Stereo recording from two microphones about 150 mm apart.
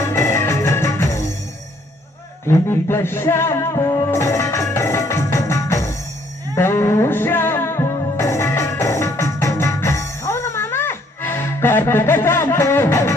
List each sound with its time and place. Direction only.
0.0 s music: 15° left (ahead or behind)
2.5 s music: 15° left (ahead or behind)